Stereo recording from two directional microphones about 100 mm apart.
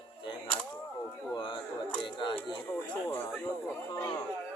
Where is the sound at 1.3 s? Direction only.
55° left (ahead or behind).